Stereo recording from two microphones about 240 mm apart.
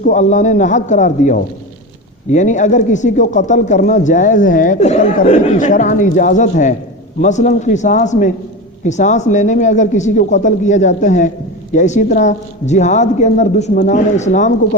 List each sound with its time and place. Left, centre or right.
0.0 s speech: left